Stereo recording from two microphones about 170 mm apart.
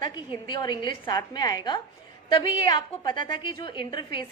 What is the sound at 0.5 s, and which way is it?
A woman's voice, 25° left (ahead or behind).